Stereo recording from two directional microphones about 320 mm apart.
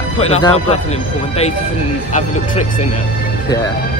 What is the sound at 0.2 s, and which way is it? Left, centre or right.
Speech, centre.